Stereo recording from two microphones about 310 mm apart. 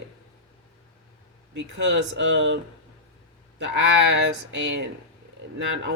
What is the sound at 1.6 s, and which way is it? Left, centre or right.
Speech, right.